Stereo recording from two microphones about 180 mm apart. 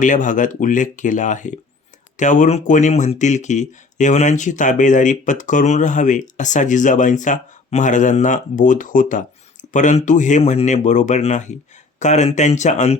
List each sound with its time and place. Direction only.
0.0 s speech: 45° left (ahead or behind)